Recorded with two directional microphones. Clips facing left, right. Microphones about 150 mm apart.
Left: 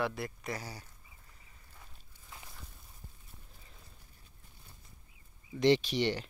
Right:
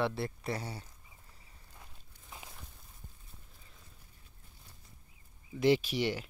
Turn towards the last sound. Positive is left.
turn(degrees=-5)  # may be behind; listen again after turning